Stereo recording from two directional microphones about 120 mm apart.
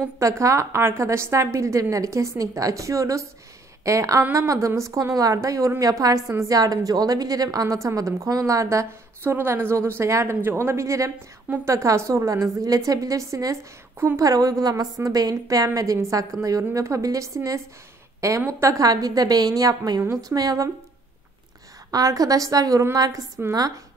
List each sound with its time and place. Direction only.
0.0 s a woman's voice: 25° right (ahead or behind)
21.9 s a woman's voice: 30° right (ahead or behind)